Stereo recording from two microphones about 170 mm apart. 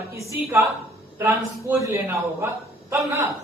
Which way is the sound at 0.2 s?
15° right (ahead or behind).